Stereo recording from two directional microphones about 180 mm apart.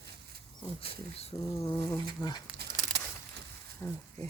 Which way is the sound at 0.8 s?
35° left (ahead or behind).